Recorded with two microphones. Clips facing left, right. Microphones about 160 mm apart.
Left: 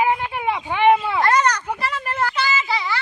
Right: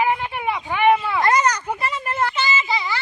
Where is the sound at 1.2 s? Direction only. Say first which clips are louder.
Even; 10° right (ahead or behind).